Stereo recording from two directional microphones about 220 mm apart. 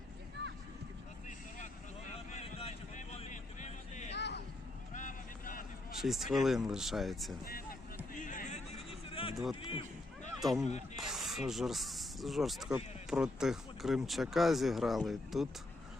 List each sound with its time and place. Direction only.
1.5 s vehicle: 35° left (ahead or behind)
4.1 s vehicle: 50° left (ahead or behind)
4.9 s a sound: 35° left (ahead or behind)
6.0 s speech: centre (ahead or behind)
7.4 s vehicle: 40° left (ahead or behind)
8.1 s a sound: 35° left (ahead or behind)
9.3 s speech: centre (ahead or behind)
10.9 s a sound: centre (ahead or behind)
12.7 s speech: 5° right (ahead or behind)